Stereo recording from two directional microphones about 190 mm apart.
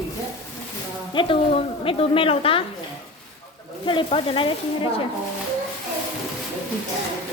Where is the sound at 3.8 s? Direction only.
25° left (ahead or behind).